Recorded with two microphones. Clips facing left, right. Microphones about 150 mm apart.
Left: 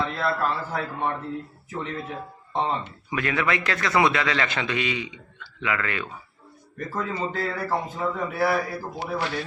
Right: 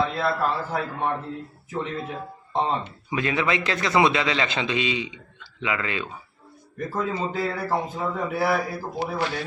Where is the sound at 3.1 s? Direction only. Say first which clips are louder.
Right 1 dB; 25° right (ahead or behind).